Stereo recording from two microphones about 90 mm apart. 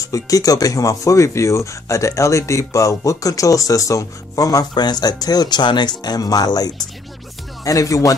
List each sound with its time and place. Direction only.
0.0 s speech: 40° left (ahead or behind)